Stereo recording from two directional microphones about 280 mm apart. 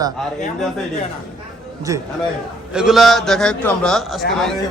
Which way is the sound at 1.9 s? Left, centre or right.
Centre.